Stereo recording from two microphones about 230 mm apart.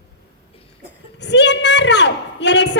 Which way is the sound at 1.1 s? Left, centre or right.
Left.